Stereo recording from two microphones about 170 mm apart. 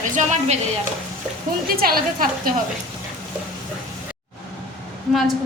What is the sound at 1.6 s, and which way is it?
Speech, 60° right (ahead or behind).